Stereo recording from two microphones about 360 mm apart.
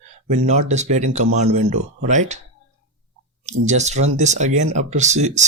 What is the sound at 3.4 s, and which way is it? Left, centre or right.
Speech, centre.